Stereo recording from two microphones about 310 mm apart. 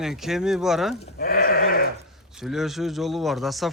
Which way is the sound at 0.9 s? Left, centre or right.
Left.